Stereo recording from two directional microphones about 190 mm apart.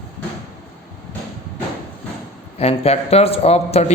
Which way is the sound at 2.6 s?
35° left (ahead or behind).